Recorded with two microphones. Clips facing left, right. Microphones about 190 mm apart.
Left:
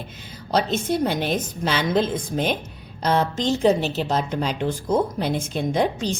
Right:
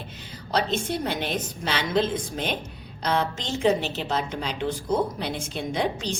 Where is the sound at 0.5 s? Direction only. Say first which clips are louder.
Left 4 dB; 45° left (ahead or behind).